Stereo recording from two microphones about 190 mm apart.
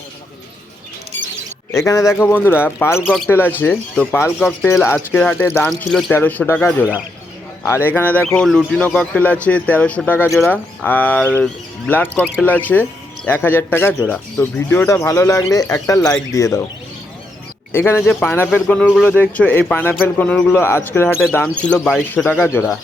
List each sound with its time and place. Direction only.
1.8 s speech: 15° left (ahead or behind)
7.9 s speech: 10° left (ahead or behind)
16.0 s speech: 5° left (ahead or behind)
16.3 s speech: 15° left (ahead or behind)
17.7 s speech: 15° left (ahead or behind)
19.1 s speech: 10° left (ahead or behind)